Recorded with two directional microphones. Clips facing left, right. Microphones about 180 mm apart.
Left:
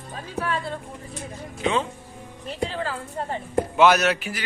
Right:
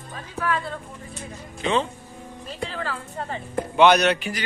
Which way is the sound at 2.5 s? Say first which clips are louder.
Left 3 dB; 35° left (ahead or behind).